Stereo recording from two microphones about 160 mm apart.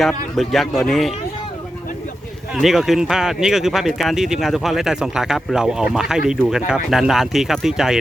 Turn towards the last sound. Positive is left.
turn(degrees=-5)  # may be behind; listen again after turning